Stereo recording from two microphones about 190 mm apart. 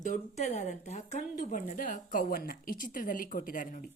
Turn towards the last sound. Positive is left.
turn(degrees=45)  # may be behind; listen again after turning